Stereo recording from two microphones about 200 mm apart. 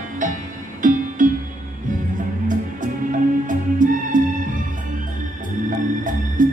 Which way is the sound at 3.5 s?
40° right (ahead or behind).